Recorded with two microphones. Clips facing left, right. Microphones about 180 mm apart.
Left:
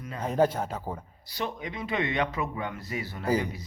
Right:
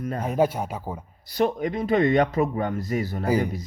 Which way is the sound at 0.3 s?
10° right (ahead or behind).